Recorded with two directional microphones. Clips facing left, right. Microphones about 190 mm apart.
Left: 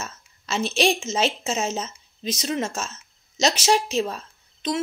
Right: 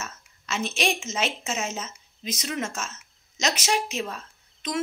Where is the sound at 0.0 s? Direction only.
30° left (ahead or behind).